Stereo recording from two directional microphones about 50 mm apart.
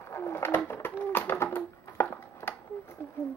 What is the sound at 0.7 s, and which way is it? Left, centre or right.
Bird, left.